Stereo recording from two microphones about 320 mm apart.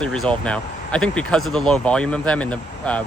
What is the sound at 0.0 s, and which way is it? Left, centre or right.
Speech, centre.